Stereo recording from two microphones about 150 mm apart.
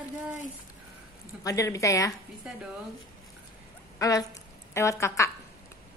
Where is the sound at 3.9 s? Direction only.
25° left (ahead or behind).